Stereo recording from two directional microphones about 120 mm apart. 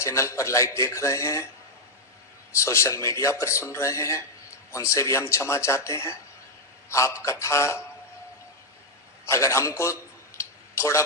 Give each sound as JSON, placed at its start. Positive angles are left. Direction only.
{"t": 0.0, "sound": "speech", "side_deg": 25}
{"t": 2.5, "sound": "speech", "side_deg": 25}
{"t": 9.2, "sound": "a sound", "side_deg": 25}